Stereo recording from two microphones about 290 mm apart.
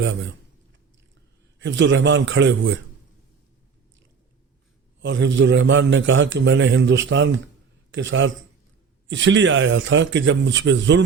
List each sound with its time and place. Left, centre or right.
0.0 s a man's voice: right
1.5 s a man's voice: right
4.9 s a man's voice: right